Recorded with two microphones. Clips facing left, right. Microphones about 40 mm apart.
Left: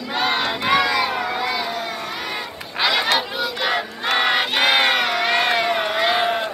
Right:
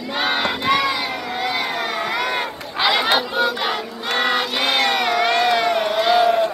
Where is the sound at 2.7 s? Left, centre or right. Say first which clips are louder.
Right 1 dB; centre.